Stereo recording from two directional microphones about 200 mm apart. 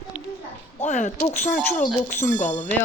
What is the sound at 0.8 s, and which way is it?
Speech, 40° left (ahead or behind).